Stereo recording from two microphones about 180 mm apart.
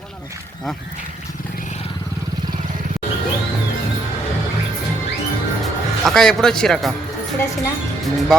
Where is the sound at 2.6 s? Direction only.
45° right (ahead or behind).